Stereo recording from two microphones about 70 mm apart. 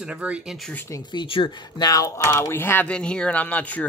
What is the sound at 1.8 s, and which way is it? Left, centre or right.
Speech, left.